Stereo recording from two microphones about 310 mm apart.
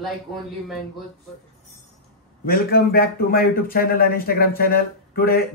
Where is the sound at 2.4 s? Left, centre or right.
Left.